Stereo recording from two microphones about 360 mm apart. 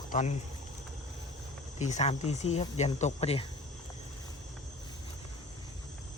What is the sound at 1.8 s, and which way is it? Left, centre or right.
Speech, centre.